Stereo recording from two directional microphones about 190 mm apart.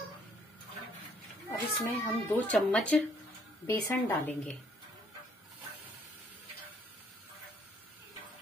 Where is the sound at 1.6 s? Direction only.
15° left (ahead or behind).